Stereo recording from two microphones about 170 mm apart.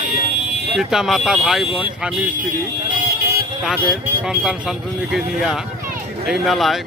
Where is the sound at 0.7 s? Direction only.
Centre (ahead or behind).